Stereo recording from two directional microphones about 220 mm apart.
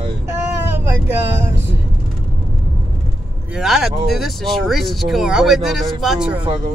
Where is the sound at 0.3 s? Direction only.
10° right (ahead or behind).